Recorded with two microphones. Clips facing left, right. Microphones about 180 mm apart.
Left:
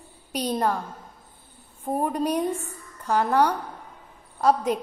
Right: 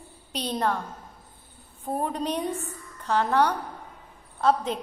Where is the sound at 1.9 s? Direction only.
10° left (ahead or behind).